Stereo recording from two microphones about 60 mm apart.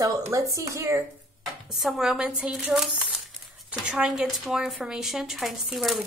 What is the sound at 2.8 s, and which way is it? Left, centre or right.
Crumpling, centre.